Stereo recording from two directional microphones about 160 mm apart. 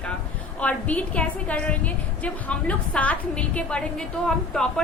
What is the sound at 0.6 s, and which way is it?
A woman's voice, 10° left (ahead or behind).